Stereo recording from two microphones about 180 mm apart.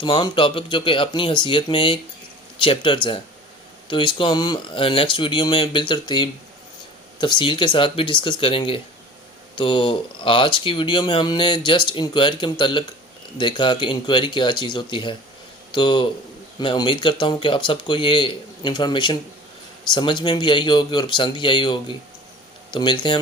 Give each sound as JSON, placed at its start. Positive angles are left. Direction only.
{"t": 0.0, "sound": "speech", "side_deg": 25}